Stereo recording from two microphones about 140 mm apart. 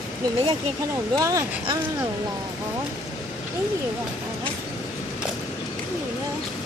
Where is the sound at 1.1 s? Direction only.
20° right (ahead or behind).